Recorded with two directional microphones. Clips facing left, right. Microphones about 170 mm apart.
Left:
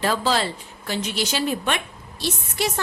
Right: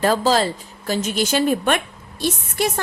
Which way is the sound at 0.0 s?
45° right (ahead or behind).